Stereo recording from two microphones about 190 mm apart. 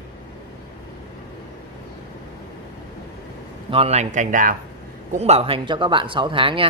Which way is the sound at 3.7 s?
30° right (ahead or behind).